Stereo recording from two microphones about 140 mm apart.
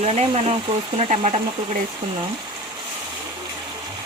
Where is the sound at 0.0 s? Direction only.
50° right (ahead or behind).